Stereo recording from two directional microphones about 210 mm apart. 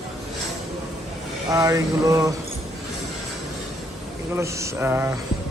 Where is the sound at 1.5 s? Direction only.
15° right (ahead or behind).